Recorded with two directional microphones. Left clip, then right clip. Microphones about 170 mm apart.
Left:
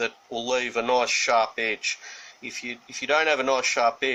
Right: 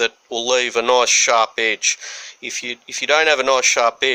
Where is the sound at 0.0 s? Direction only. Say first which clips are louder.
Right 8 dB; 60° right (ahead or behind).